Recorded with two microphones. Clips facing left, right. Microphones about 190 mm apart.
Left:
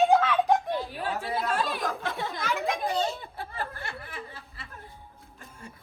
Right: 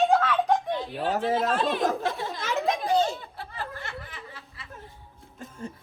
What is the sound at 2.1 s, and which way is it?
Speech, 55° left (ahead or behind).